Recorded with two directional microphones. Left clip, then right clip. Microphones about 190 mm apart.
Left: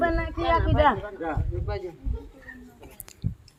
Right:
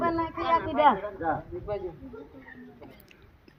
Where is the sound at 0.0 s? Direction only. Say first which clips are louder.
Left 2 dB; 35° right (ahead or behind).